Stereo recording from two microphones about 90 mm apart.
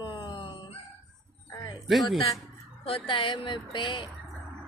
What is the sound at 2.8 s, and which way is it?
Speech, 80° left.